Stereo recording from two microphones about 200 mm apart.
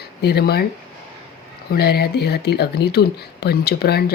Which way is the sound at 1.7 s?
50° left (ahead or behind).